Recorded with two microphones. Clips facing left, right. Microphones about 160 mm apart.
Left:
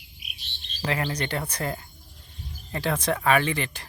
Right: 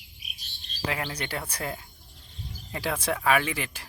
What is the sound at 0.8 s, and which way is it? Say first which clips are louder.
Speech: left 4 dB; 5° right (ahead or behind).